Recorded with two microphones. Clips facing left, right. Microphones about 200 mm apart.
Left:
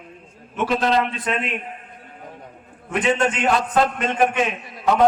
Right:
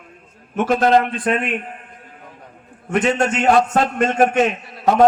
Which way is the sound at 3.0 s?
45° right (ahead or behind).